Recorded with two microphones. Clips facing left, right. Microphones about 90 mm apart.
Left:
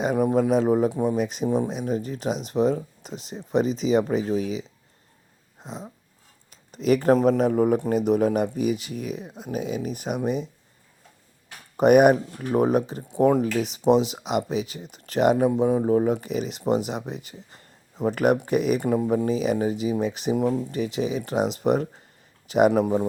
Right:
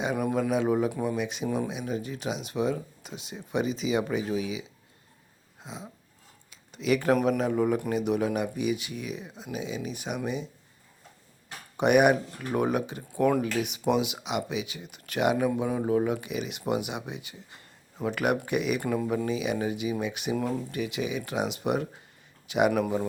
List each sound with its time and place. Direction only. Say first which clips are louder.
0.2 s speech: left 7 dB; 30° left (ahead or behind)
5.6 s speech: left 4 dB; 45° left (ahead or behind)
11.8 s speech: left 5 dB; 40° left (ahead or behind)
13.1 s speech: left 4 dB; 25° left (ahead or behind); by 18.8 s 40° left (ahead or behind)
18.8 s speech: left 5 dB; 30° left (ahead or behind)
20.3 s speech: left 6 dB; 25° left (ahead or behind)
20.7 s a man's voice: left 5 dB; 35° left (ahead or behind)
22.7 s speech: left 5 dB; 25° left (ahead or behind)